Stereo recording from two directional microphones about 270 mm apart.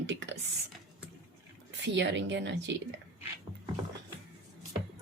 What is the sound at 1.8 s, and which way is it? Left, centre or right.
A woman's voice, right.